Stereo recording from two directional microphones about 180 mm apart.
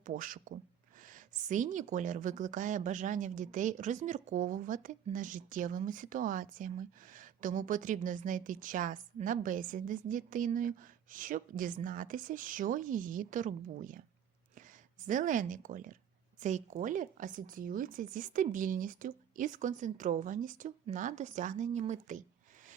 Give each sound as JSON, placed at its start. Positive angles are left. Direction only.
{"t": 0.0, "sound": "speech", "side_deg": -50}
{"t": 15.0, "sound": "speech", "side_deg": -45}